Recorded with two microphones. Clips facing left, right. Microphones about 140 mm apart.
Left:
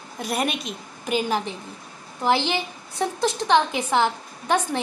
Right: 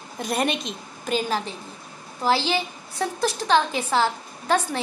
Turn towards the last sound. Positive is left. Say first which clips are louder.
# even
turn(degrees=20)  # may be behind; listen again after turning